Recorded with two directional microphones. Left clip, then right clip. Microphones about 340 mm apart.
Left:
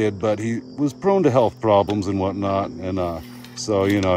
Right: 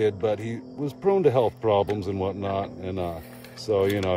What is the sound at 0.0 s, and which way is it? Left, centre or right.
Speech, left.